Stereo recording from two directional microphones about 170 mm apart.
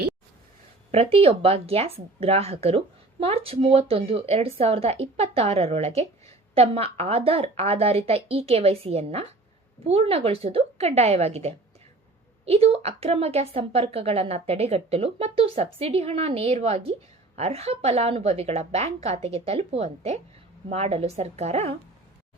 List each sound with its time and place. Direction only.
0.9 s speech: 35° right (ahead or behind)